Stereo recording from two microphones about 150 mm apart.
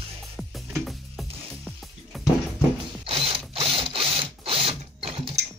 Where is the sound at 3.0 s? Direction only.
40° right (ahead or behind).